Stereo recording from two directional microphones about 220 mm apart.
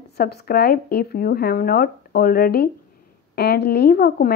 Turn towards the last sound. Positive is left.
turn(degrees=45)  # may be behind; listen again after turning